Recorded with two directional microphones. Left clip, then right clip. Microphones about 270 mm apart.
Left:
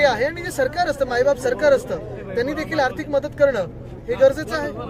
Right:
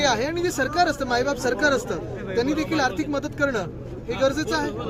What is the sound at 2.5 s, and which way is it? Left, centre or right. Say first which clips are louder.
Speech: right 1 dB; right.